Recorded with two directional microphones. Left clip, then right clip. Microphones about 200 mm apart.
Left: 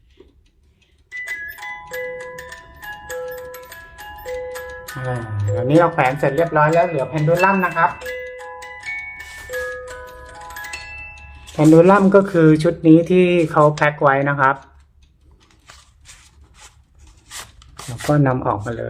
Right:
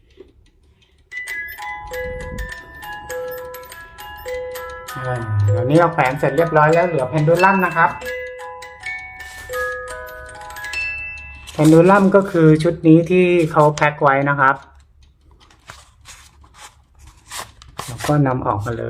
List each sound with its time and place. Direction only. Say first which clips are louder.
3.2 s music: right 2 dB; 15° right (ahead or behind)
4.9 s speech: right 2 dB; 10° left (ahead or behind)
11.5 s speech: even; 5° left (ahead or behind)
18.0 s speech: even; 5° left (ahead or behind)